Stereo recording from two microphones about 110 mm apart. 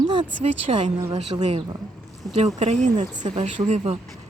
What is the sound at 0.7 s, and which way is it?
Speech, 60° right (ahead or behind).